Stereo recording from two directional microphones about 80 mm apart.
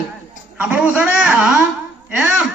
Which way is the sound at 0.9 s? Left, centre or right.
Centre.